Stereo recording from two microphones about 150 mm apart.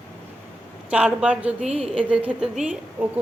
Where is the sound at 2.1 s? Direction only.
10° right (ahead or behind).